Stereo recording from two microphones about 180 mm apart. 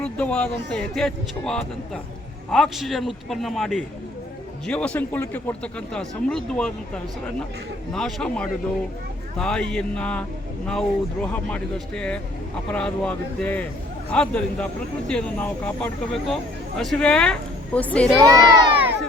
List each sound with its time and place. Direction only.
0.0 s speech: 5° left (ahead or behind)
18.2 s speech: 20° right (ahead or behind)